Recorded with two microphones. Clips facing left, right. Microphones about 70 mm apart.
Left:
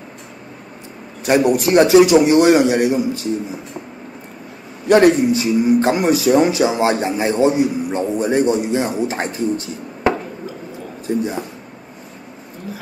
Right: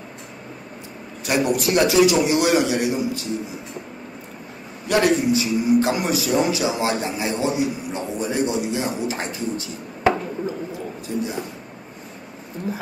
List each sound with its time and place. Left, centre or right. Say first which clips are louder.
1.5 s speech: left 7 dB; left
4.8 s speech: left 7 dB; left
11.1 s speech: left 6 dB; left